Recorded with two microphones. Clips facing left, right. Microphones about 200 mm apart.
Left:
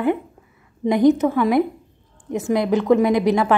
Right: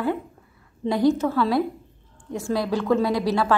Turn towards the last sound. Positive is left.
turn(degrees=20)  # may be behind; listen again after turning